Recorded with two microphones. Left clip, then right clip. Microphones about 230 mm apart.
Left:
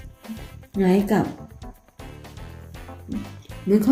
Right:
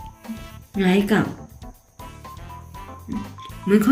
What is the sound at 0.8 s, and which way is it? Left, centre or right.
Speech, centre.